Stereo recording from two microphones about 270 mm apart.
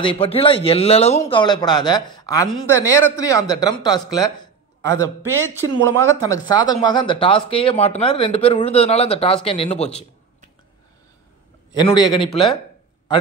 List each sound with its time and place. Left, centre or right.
0.0 s speech: centre
5.8 s speech: right
6.2 s speech: centre
11.7 s speech: centre